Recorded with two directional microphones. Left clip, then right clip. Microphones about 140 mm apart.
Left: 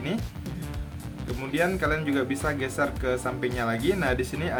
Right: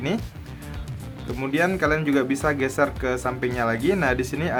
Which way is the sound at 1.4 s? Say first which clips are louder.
Right 4 dB; 30° right (ahead or behind).